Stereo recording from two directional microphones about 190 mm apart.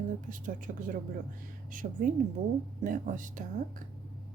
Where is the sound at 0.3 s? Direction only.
45° right (ahead or behind).